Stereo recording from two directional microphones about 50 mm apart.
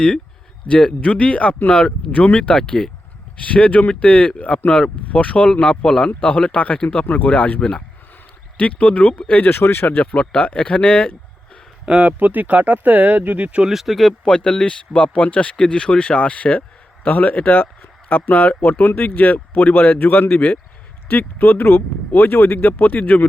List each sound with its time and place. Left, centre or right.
0.7 s speech: left
9.6 s speech: left
10.0 s speech: left
11.9 s speech: right
13.7 s speech: centre
14.3 s speech: centre; by 23.2 s left